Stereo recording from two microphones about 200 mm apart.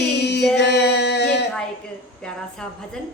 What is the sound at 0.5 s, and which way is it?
Music, 60° left (ahead or behind).